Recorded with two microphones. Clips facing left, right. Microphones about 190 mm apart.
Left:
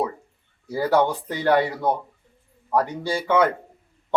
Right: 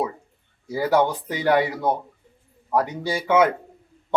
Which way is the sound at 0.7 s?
15° right (ahead or behind).